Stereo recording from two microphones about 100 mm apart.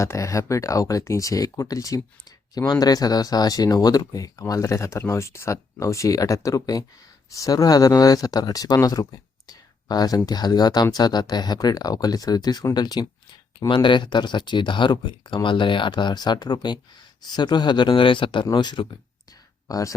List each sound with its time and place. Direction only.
0.0 s speech: 30° left (ahead or behind)
9.5 s a sound: 40° left (ahead or behind)
10.2 s speech: 45° left (ahead or behind)
19.6 s speech: 35° left (ahead or behind)